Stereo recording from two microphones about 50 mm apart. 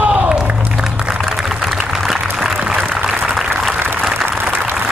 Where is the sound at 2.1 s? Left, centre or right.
Centre.